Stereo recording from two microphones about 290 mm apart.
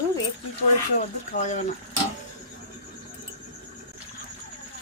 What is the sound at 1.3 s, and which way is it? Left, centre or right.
Speech, left.